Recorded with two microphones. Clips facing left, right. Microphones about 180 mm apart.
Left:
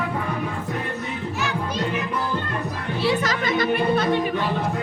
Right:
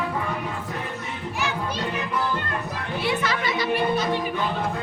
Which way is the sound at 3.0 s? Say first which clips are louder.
Left 3 dB; 35° left (ahead or behind).